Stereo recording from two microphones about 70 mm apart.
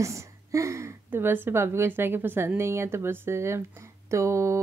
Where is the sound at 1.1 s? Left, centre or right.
Right.